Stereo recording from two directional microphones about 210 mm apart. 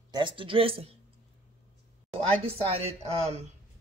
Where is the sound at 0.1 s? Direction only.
25° right (ahead or behind).